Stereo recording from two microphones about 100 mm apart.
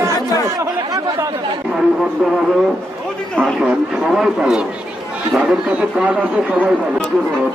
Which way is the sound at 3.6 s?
5° right (ahead or behind).